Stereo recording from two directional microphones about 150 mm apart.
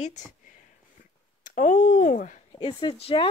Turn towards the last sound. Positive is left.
turn(degrees=40)  # may be behind; listen again after turning